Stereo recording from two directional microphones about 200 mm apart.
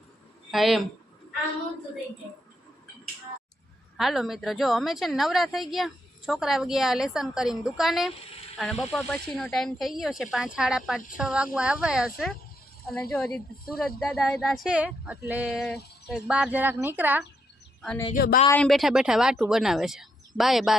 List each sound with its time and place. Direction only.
0.5 s speech: centre (ahead or behind)
3.9 s speech: centre (ahead or behind)
18.1 s speech: 45° left (ahead or behind)
18.4 s speech: 5° left (ahead or behind)